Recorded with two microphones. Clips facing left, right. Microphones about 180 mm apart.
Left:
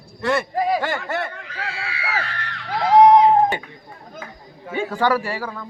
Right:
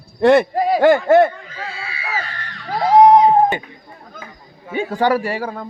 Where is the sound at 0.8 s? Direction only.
50° right (ahead or behind).